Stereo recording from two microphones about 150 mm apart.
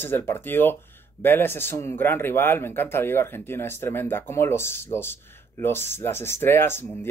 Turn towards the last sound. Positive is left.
turn(degrees=15)  # may be behind; listen again after turning